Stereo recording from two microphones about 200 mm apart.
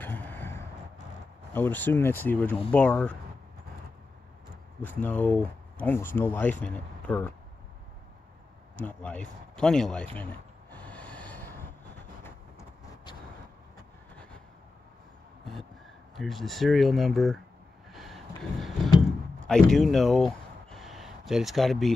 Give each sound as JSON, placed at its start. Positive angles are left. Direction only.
{"t": 0.0, "sound": "a sound", "side_deg": 10}
{"t": 1.5, "sound": "speech", "side_deg": 10}
{"t": 4.8, "sound": "speech", "side_deg": 10}
{"t": 8.7, "sound": "speech", "side_deg": 5}
{"t": 10.1, "sound": "a sound", "side_deg": 10}
{"t": 12.2, "sound": "vehicle", "side_deg": 15}
{"t": 16.2, "sound": "speech", "side_deg": 0}
{"t": 17.9, "sound": "vehicle", "side_deg": 0}
{"t": 19.4, "sound": "speech", "side_deg": 5}